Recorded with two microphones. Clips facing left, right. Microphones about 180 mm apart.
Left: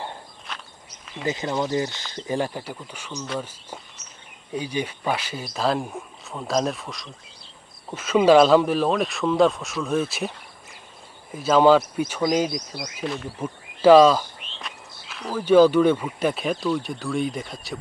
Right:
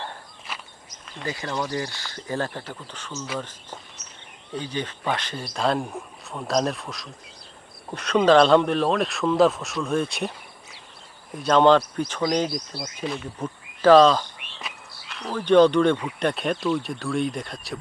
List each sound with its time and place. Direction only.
0.5 s walk: 5° right (ahead or behind)
1.2 s speech: 20° left (ahead or behind); by 17.7 s centre (ahead or behind)